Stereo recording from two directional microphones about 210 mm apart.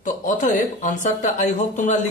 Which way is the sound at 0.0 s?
40° left (ahead or behind).